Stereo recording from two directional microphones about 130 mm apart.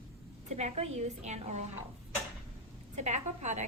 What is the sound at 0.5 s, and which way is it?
A woman's voice, 60° right (ahead or behind).